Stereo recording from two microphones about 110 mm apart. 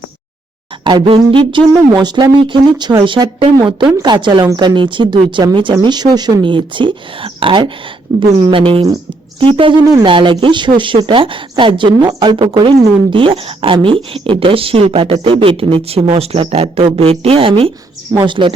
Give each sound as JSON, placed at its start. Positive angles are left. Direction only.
{"t": 1.0, "sound": "speech", "side_deg": -50}
{"t": 8.1, "sound": "a woman's voice", "side_deg": -25}
{"t": 8.5, "sound": "speech", "side_deg": -55}